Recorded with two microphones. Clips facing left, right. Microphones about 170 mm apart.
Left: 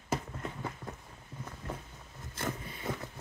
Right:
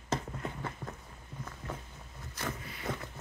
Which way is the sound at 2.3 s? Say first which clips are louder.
Left 2 dB; 25° left (ahead or behind).